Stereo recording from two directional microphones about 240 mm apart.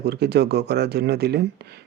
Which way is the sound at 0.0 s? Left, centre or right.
Right.